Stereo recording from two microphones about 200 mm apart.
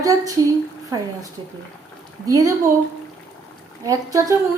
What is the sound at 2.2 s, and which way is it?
Speech, 15° right (ahead or behind).